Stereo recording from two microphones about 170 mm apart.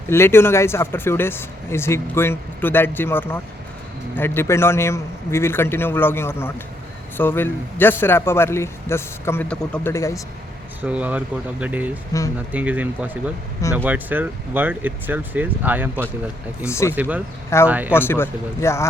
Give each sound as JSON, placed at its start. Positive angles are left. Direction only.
{"t": 0.1, "sound": "speech", "side_deg": 15}
{"t": 10.8, "sound": "speech", "side_deg": -10}
{"t": 12.1, "sound": "speech", "side_deg": 20}
{"t": 12.5, "sound": "speech", "side_deg": -10}
{"t": 16.6, "sound": "speech", "side_deg": 15}
{"t": 16.9, "sound": "speech", "side_deg": -10}
{"t": 17.9, "sound": "speech", "side_deg": 15}